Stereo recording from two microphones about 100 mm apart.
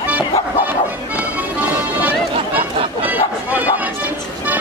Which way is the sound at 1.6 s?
15° right (ahead or behind).